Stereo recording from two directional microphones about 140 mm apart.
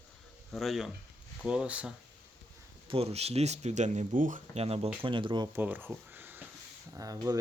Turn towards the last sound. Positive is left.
turn(degrees=-25)  # may be behind; listen again after turning